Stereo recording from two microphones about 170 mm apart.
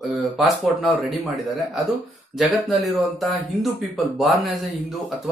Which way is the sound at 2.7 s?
Centre (ahead or behind).